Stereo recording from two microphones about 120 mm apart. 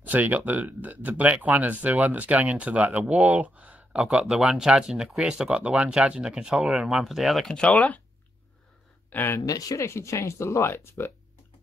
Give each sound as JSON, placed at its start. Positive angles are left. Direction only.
{"t": 0.0, "sound": "speech", "side_deg": -15}
{"t": 9.1, "sound": "speech", "side_deg": 20}
{"t": 9.5, "sound": "speech", "side_deg": 30}